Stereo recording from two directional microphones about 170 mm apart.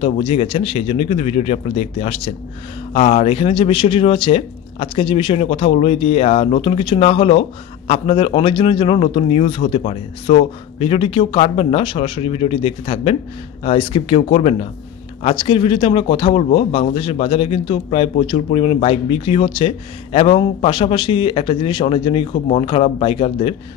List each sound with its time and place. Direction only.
0.0 s speech: 30° left (ahead or behind)